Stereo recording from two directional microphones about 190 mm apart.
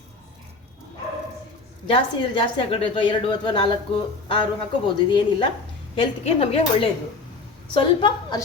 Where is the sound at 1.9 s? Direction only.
25° left (ahead or behind).